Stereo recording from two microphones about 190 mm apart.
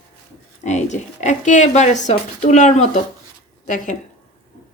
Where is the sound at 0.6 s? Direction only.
40° left (ahead or behind).